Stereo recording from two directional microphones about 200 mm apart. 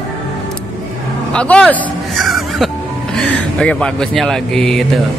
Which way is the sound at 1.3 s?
5° left (ahead or behind).